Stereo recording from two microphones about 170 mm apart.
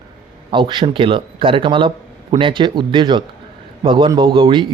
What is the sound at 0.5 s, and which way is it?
Speech, 30° right (ahead or behind).